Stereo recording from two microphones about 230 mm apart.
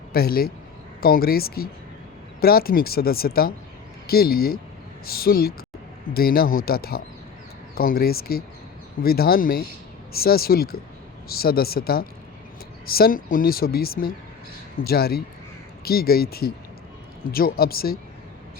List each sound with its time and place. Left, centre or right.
0.1 s a man's voice: left